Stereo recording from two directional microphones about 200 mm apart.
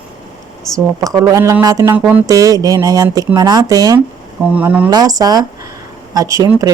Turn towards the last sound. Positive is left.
turn(degrees=-15)  # may be behind; listen again after turning